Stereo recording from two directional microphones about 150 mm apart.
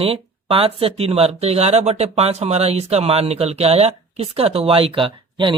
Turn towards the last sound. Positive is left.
turn(degrees=-35)  # may be behind; listen again after turning